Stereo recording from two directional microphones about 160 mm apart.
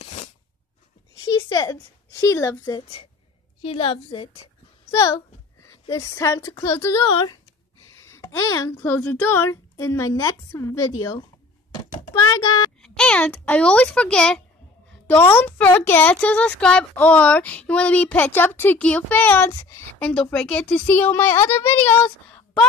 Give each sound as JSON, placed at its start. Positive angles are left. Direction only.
{"t": 0.0, "sound": "a sound", "side_deg": 45}
{"t": 1.2, "sound": "a sound", "side_deg": 30}
{"t": 2.2, "sound": "speech", "side_deg": 20}
{"t": 3.6, "sound": "a woman's voice", "side_deg": 35}
{"t": 4.9, "sound": "speech", "side_deg": 20}
{"t": 7.1, "sound": "a woman's voice", "side_deg": 30}
{"t": 8.1, "sound": "speech", "side_deg": 20}
{"t": 11.7, "sound": "a sound", "side_deg": 25}
{"t": 12.8, "sound": "speech", "side_deg": 5}
{"t": 20.0, "sound": "speech", "side_deg": 5}